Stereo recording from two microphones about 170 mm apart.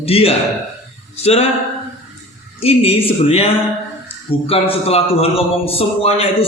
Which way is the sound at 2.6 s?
35° left (ahead or behind).